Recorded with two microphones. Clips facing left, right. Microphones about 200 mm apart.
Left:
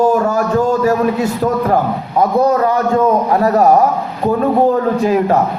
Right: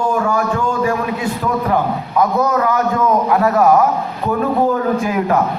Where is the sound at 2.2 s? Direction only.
30° left (ahead or behind).